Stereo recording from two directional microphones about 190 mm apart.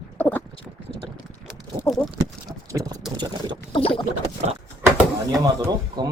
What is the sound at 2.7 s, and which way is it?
Boat, 20° right (ahead or behind).